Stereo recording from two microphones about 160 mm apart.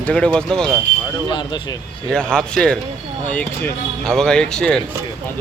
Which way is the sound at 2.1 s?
5° left (ahead or behind).